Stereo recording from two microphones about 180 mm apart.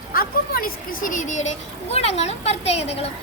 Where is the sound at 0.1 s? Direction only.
55° left (ahead or behind).